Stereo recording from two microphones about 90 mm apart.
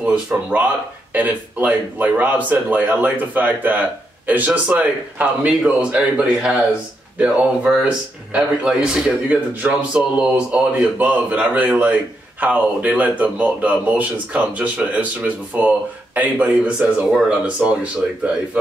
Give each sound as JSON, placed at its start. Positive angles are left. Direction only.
{"t": 0.0, "sound": "speech", "side_deg": -15}